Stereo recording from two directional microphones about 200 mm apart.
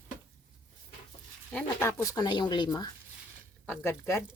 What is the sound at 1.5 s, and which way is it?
Speech, 10° left (ahead or behind).